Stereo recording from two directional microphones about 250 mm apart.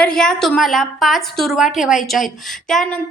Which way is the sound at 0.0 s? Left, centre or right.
Centre.